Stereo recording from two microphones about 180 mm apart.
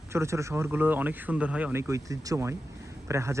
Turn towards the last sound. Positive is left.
turn(degrees=-15)  # may be behind; listen again after turning